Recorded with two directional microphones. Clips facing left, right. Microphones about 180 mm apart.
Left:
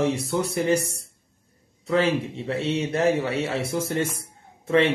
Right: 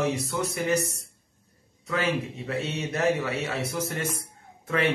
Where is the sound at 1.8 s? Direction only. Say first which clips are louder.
Left 5 dB; 30° left (ahead or behind).